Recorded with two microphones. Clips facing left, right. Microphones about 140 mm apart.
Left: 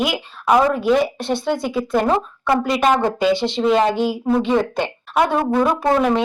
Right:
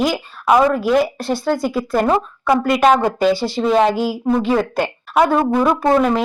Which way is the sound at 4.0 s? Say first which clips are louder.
Even; 5° right (ahead or behind).